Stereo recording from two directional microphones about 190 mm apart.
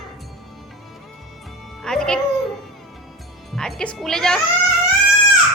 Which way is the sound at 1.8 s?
5° left (ahead or behind).